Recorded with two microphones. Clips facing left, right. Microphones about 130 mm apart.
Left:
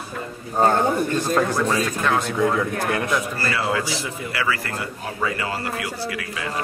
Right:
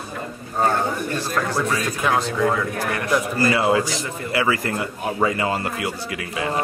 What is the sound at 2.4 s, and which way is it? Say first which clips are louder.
Speech: even; 20° left (ahead or behind).